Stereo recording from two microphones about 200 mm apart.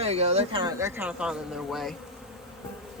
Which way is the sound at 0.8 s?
10° right (ahead or behind).